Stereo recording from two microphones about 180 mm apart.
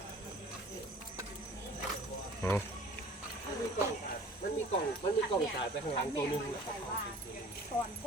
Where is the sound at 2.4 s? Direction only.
15° left (ahead or behind).